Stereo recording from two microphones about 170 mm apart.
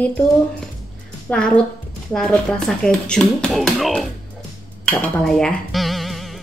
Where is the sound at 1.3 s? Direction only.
5° left (ahead or behind).